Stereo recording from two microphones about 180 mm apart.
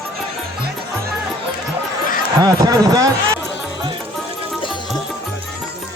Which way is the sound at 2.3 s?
20° right (ahead or behind).